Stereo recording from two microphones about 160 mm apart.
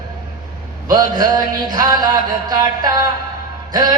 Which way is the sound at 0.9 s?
25° right (ahead or behind).